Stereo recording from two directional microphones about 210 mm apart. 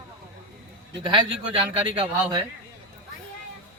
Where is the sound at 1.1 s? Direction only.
25° right (ahead or behind).